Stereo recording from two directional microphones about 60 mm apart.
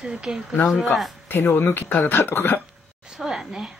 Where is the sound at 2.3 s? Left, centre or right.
Left.